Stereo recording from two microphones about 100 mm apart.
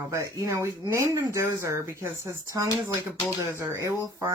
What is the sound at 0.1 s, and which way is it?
Speech, 30° right (ahead or behind).